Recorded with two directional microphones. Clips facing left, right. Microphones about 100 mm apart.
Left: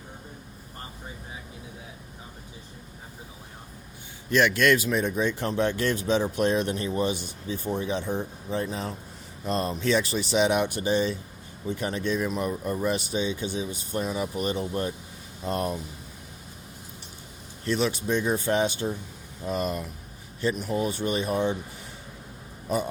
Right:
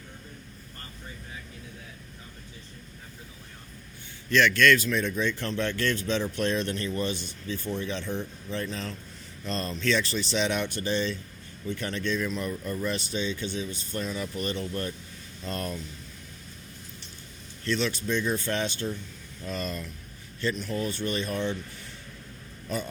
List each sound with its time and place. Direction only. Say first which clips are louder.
0.8 s vehicle: left 4 dB; 20° left (ahead or behind)
4.3 s speech: even; 15° left (ahead or behind)
8.0 s speech: left 3 dB; 45° left (ahead or behind)
8.4 s speech: left 4 dB; 15° left (ahead or behind)
17.7 s speech: left 3 dB; 15° left (ahead or behind)